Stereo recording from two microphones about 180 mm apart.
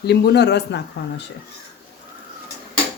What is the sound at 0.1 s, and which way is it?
Speech, 65° left (ahead or behind).